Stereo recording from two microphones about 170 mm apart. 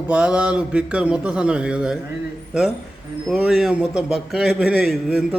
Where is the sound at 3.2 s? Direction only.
5° right (ahead or behind).